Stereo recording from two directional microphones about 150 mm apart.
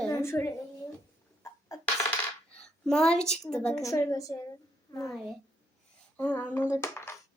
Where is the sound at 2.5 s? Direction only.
5° left (ahead or behind).